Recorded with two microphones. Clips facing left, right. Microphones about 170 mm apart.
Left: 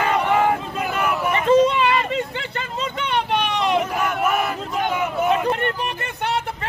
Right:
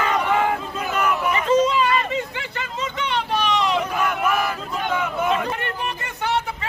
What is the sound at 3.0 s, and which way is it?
Vehicle, 55° left (ahead or behind).